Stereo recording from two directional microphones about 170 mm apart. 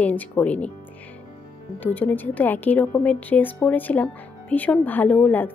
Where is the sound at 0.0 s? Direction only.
10° left (ahead or behind).